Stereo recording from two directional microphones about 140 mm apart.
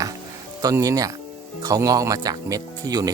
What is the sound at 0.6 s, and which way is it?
Speech, 25° right (ahead or behind).